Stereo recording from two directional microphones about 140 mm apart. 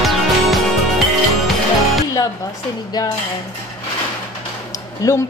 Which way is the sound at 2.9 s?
30° left (ahead or behind).